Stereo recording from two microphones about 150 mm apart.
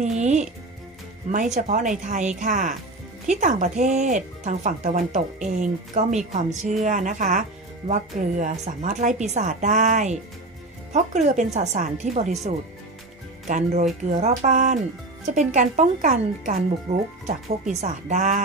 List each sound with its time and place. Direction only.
0.0 s music: 50° right (ahead or behind)
1.3 s speech: 55° right (ahead or behind)
13.5 s speech: 55° right (ahead or behind)
16.9 s speech: 45° right (ahead or behind)